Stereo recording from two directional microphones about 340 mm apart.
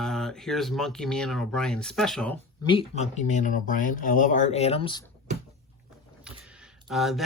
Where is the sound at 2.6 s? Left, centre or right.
Centre.